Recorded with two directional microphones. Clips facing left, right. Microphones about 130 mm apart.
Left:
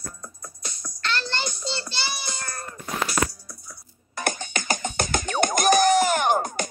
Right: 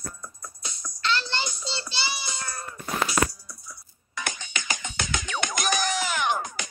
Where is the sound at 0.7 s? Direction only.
50° left (ahead or behind).